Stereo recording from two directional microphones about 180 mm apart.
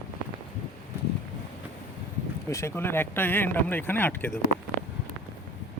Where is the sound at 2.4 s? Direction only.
15° left (ahead or behind).